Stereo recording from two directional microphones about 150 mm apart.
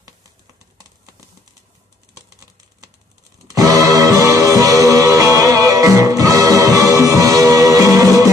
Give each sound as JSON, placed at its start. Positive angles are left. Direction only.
{"t": 3.4, "sound": "music", "side_deg": -25}